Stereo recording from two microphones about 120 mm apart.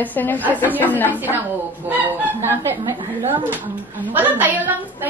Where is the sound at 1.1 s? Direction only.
15° right (ahead or behind).